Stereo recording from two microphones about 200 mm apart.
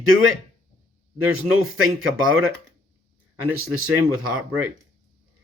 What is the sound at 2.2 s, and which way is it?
Speech, 90° right.